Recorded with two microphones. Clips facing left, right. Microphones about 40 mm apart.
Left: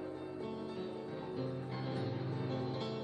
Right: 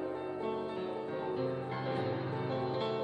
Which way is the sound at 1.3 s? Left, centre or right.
Right.